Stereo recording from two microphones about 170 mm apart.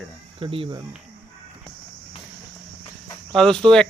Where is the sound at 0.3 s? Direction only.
30° right (ahead or behind).